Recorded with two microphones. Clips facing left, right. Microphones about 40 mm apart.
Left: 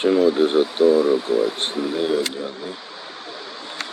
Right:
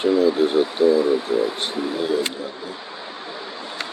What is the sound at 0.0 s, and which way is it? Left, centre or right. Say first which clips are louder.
Speech: left 1 dB; left.